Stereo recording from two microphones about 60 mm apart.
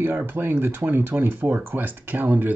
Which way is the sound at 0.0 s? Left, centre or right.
Right.